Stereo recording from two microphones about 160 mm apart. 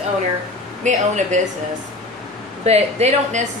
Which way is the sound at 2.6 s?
45° right (ahead or behind).